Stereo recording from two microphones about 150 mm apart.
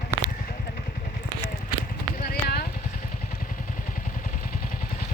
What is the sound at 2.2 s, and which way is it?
Vehicle, 90° left.